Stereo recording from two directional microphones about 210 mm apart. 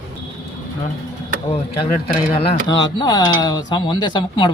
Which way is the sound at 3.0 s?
20° left (ahead or behind).